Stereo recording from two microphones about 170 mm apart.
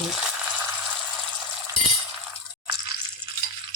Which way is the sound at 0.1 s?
5° right (ahead or behind).